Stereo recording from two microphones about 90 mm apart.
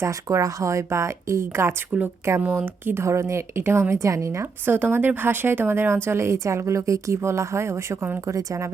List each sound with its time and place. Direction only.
0.0 s a woman's voice: 35° right (ahead or behind)
4.6 s a woman's voice: 20° right (ahead or behind)